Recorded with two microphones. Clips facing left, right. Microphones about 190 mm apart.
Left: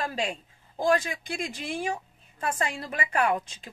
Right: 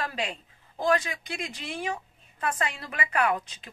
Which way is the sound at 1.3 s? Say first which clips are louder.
Left 5 dB; 50° left (ahead or behind).